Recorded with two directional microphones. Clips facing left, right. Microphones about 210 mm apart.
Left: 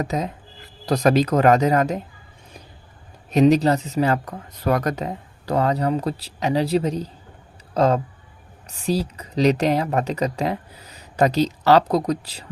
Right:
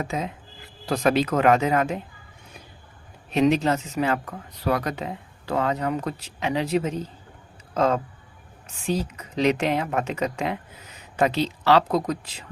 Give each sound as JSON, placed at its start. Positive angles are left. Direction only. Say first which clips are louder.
{"t": 0.0, "sound": "speech", "louder": "left 4 dB", "side_deg": 40}
{"t": 3.2, "sound": "speech", "louder": "left 4 dB", "side_deg": 40}